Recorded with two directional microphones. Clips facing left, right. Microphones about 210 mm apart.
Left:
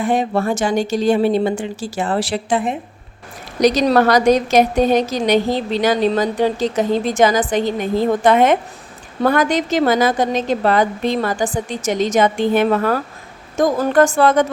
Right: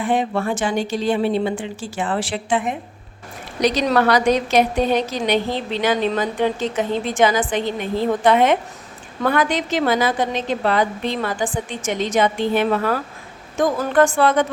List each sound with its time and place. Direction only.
0.0 s a woman's voice: 40° left (ahead or behind)
3.6 s a woman's voice: 40° left (ahead or behind)